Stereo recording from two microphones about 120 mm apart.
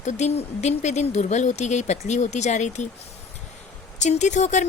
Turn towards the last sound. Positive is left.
turn(degrees=80)